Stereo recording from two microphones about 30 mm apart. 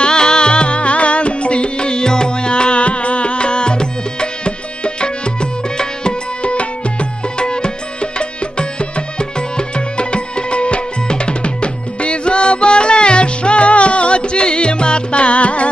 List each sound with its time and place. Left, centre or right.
0.0 s music: left
6.4 s music: left
7.3 s music: left